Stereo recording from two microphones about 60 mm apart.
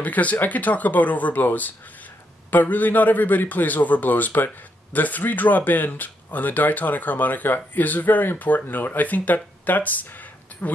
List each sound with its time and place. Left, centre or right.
0.0 s speech: left